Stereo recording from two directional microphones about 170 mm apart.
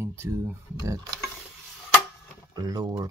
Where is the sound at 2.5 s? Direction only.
25° right (ahead or behind).